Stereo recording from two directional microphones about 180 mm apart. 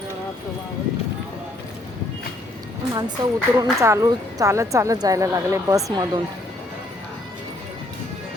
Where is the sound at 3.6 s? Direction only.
15° right (ahead or behind).